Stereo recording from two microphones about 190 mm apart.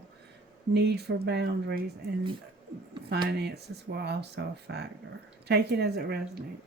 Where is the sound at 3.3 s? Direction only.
60° right (ahead or behind).